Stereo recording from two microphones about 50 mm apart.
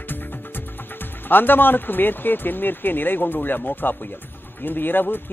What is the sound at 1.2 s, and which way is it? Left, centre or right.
A woman's voice, left.